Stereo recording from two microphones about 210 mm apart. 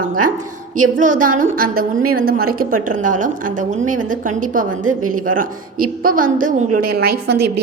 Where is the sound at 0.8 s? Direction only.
40° right (ahead or behind).